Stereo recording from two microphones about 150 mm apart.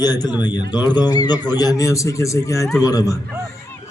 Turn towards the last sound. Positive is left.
turn(degrees=25)  # may be behind; listen again after turning